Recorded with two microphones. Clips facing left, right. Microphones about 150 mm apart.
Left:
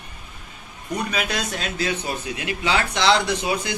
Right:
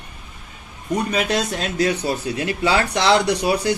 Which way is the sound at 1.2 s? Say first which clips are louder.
Right 5 dB; 35° right (ahead or behind).